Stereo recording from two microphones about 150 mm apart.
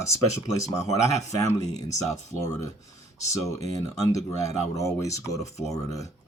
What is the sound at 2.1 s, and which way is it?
Speech, 20° left (ahead or behind).